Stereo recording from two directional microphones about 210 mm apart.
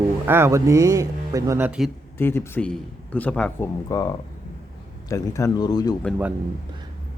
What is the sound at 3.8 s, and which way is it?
A man's voice, 15° left (ahead or behind).